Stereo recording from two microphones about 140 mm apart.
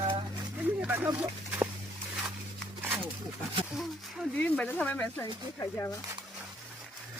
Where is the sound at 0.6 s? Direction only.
15° right (ahead or behind).